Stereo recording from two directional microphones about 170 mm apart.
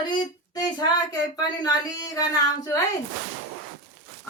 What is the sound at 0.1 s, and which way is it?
Speech, 25° left (ahead or behind).